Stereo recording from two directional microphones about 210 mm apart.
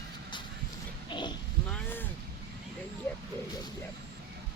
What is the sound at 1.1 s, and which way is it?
Speech, 20° left (ahead or behind).